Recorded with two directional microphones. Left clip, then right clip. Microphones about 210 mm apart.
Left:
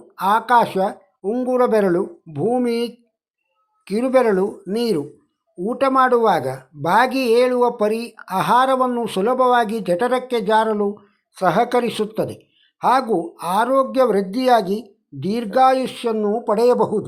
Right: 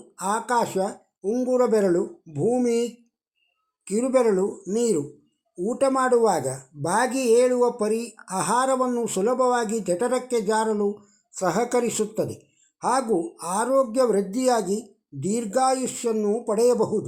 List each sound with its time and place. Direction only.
0.2 s speech: 5° left (ahead or behind)